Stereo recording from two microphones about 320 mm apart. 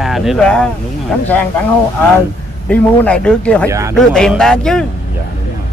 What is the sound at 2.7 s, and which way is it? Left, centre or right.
Speech, centre.